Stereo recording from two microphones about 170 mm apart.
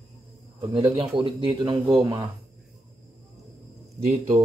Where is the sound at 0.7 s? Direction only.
30° right (ahead or behind).